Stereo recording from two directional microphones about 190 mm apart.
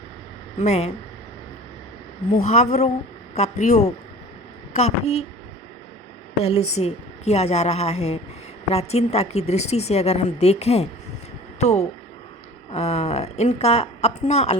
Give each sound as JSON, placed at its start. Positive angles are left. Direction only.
{"t": 0.6, "sound": "a woman's voice", "side_deg": 35}
{"t": 2.3, "sound": "a woman's voice", "side_deg": 35}
{"t": 6.4, "sound": "a woman's voice", "side_deg": 30}